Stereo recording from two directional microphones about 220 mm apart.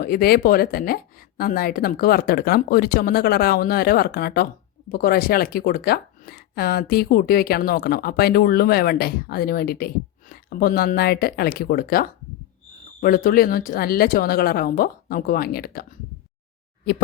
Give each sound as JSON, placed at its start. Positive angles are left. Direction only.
{"t": 0.0, "sound": "speech", "side_deg": 45}